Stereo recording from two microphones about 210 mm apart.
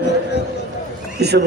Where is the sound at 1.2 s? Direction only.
50° right (ahead or behind).